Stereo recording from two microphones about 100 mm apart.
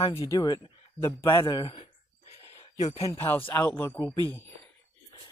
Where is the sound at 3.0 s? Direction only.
25° left (ahead or behind).